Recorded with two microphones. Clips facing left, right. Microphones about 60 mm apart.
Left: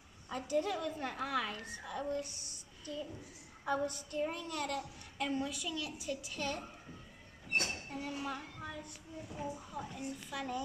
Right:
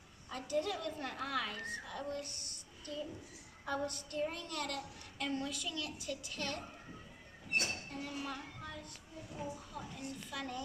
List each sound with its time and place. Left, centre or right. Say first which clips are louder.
0.3 s a woman's voice: left 2 dB; centre
7.7 s a sound: left 2 dB; centre
9.3 s a woman's voice: left 2 dB; centre